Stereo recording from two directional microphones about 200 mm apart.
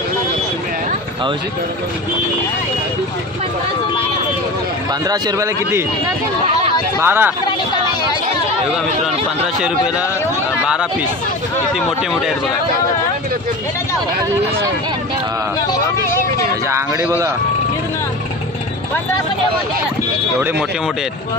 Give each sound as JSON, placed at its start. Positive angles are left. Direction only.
{"t": 5.0, "sound": "a man's voice", "side_deg": -20}
{"t": 7.0, "sound": "a man's voice", "side_deg": -10}
{"t": 15.6, "sound": "speech", "side_deg": 15}
{"t": 16.6, "sound": "a man's voice", "side_deg": -15}